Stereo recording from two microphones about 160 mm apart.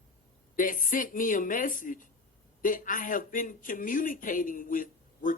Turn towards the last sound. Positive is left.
turn(degrees=55)  # may be behind; listen again after turning